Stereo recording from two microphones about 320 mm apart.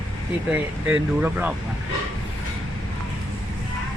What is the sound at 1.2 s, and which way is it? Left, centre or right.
Speech, centre.